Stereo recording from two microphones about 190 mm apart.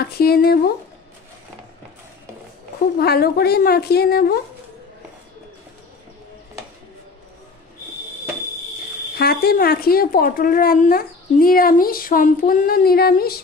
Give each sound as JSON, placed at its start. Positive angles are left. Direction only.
{"t": 0.0, "sound": "a sound", "side_deg": 55}
{"t": 3.0, "sound": "a woman's voice", "side_deg": 55}
{"t": 9.1, "sound": "speech", "side_deg": 55}